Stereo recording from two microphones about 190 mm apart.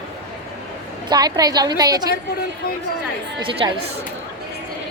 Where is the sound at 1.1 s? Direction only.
20° right (ahead or behind).